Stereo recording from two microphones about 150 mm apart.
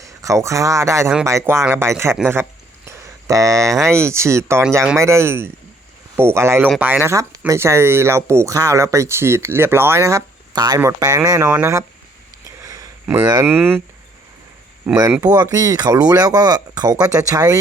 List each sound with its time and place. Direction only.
0.0 s speech: 20° right (ahead or behind)
2.1 s a sound: 15° right (ahead or behind)
3.8 s speech: 20° right (ahead or behind)
12.5 s sniff: 25° right (ahead or behind)
13.3 s speech: 15° right (ahead or behind)
15.2 s speech: 25° right (ahead or behind)